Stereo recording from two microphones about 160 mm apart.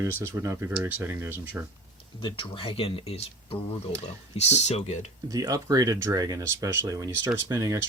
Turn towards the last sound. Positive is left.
turn(degrees=-20)  # may be behind; listen again after turning